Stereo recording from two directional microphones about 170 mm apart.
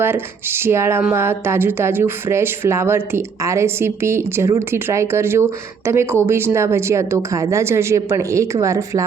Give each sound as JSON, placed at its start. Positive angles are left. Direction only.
{"t": 0.0, "sound": "speech", "side_deg": -15}